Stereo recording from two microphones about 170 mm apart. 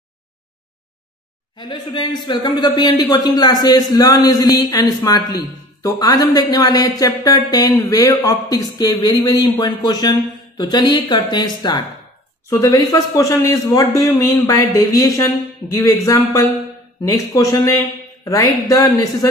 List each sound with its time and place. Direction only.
1.6 s a man's voice: 30° left (ahead or behind)